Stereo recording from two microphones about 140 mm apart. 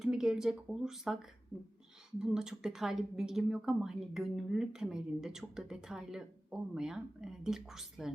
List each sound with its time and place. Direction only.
0.0 s a woman's voice: 5° right (ahead or behind)